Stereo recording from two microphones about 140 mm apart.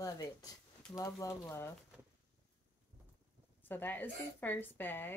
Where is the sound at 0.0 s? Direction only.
25° left (ahead or behind).